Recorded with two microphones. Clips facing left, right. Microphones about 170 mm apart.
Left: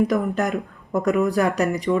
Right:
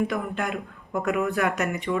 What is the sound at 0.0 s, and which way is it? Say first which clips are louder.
Speech: left 6 dB; 40° left (ahead or behind).